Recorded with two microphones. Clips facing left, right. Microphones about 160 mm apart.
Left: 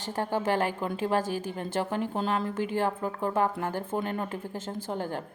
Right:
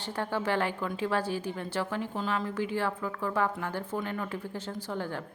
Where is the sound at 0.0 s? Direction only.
45° left (ahead or behind).